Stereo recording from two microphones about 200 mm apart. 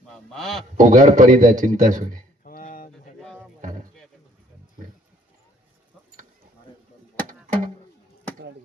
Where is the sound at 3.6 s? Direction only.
40° right (ahead or behind).